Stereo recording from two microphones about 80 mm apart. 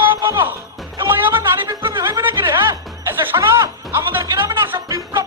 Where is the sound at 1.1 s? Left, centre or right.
Right.